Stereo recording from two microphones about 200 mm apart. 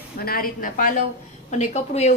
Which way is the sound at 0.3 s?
45° left (ahead or behind).